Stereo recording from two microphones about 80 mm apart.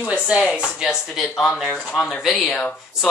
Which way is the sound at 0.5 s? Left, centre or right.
Left.